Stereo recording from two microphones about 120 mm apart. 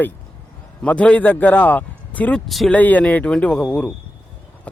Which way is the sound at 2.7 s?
15° left (ahead or behind).